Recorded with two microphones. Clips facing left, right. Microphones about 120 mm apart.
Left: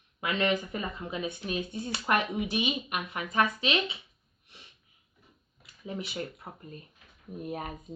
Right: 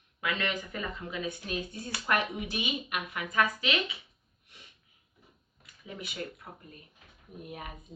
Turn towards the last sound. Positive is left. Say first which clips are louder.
# left 7 dB
turn(degrees=40)  # may be behind; listen again after turning